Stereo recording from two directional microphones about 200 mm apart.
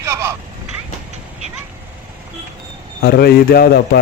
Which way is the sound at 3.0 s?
50° left (ahead or behind).